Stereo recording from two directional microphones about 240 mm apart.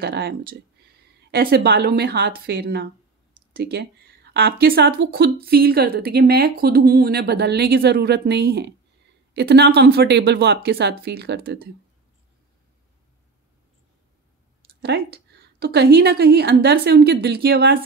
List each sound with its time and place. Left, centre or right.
0.0 s speech: right
14.8 s speech: right